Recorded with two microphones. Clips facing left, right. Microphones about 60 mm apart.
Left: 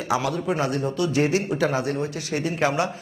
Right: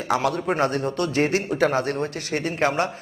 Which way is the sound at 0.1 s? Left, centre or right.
Right.